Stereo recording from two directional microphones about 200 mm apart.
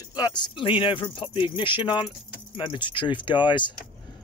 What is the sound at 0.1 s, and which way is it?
Speech, 20° left (ahead or behind).